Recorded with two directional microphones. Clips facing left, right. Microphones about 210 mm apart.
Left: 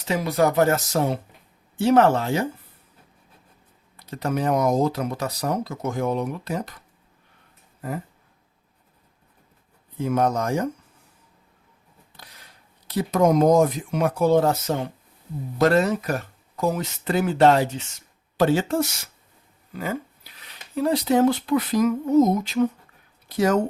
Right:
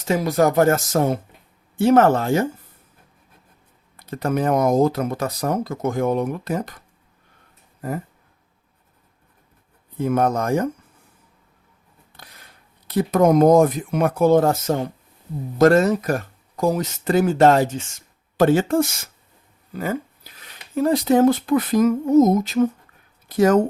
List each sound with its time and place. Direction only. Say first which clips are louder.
0.0 s speech: right 3 dB; 45° right (ahead or behind)
3.9 s speech: right 3 dB; 55° right (ahead or behind)
7.8 s a sound: right 3 dB; 45° right (ahead or behind)
10.0 s speech: right 2 dB; 55° right (ahead or behind)
12.9 s speech: right 3 dB; 55° right (ahead or behind)